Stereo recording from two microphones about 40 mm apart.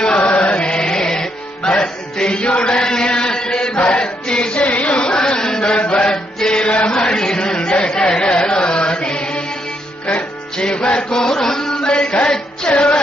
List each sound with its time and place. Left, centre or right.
0.2 s music: left
3.8 s chant: left
5.8 s chant: left
6.1 s music: left
7.3 s chatter: centre
7.9 s chant: left
10.6 s mantra: left
11.7 s chant: left